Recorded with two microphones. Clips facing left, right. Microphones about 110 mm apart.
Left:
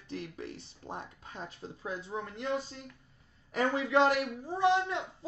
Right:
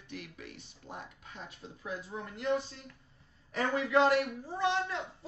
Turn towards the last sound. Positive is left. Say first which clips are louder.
# left 1 dB
turn(degrees=20)  # may be behind; listen again after turning